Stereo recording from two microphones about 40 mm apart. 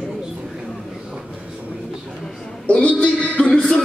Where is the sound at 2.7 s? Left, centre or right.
Left.